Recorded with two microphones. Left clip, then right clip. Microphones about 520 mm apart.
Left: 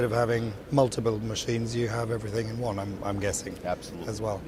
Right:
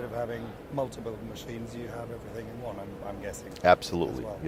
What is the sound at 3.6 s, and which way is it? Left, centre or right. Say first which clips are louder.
Speech: right 12 dB; right.